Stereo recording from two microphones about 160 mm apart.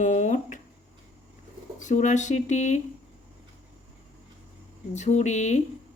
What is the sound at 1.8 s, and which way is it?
Speech, 50° left (ahead or behind).